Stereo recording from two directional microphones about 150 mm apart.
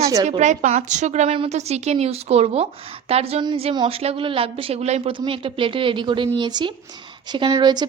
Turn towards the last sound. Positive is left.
turn(degrees=-30)  # may be behind; listen again after turning